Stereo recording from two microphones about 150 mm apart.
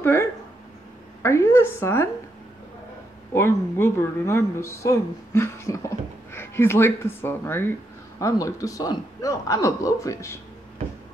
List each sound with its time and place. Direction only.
0.0 s a sound: 15° left (ahead or behind)
1.2 s a woman's voice: 15° left (ahead or behind)
3.3 s speech: 15° left (ahead or behind)